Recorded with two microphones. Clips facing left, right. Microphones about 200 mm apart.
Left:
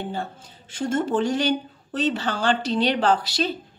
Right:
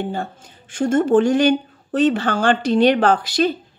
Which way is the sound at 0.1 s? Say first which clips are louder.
Right 4 dB; 50° right (ahead or behind).